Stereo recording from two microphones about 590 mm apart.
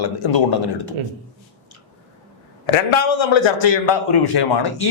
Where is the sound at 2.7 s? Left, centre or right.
Left.